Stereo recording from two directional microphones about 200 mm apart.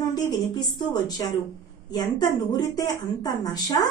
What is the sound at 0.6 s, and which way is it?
A woman's voice, 20° left (ahead or behind).